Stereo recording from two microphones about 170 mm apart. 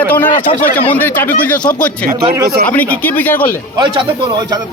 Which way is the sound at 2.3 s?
20° right (ahead or behind).